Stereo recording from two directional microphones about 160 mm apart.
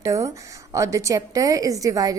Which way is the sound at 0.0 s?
20° right (ahead or behind).